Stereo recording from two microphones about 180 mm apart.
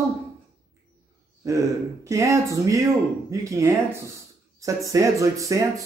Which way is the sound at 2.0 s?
15° right (ahead or behind).